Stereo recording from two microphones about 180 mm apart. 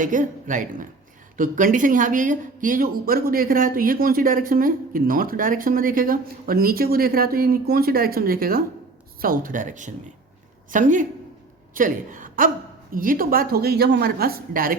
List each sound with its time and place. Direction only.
0.0 s a woman's voice: 45° right (ahead or behind)